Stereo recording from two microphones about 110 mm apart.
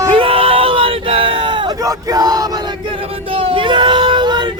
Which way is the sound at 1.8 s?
35° right (ahead or behind).